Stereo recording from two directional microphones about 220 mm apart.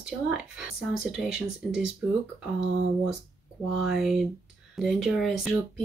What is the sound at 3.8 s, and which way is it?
Speech, centre (ahead or behind).